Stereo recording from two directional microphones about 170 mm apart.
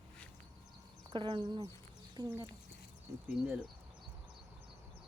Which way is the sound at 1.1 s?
30° right (ahead or behind).